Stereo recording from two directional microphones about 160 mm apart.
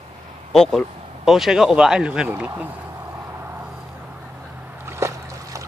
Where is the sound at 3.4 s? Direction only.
15° right (ahead or behind).